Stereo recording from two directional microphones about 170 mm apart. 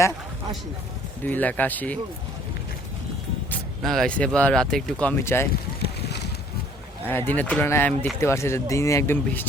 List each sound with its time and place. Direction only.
1.2 s speech: 10° left (ahead or behind)
3.8 s speech: 5° left (ahead or behind)
5.8 s boat: 75° left (ahead or behind)
7.1 s speech: 10° left (ahead or behind)